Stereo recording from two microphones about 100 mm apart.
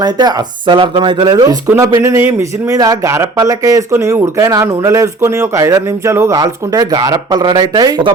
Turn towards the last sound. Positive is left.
turn(degrees=-40)  # may be behind; listen again after turning